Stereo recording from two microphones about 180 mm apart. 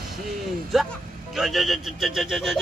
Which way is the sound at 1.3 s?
Centre (ahead or behind).